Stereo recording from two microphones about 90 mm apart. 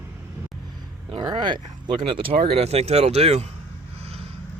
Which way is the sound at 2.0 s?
75° right (ahead or behind).